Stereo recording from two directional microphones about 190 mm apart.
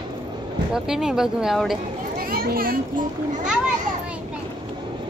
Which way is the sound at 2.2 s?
50° right (ahead or behind).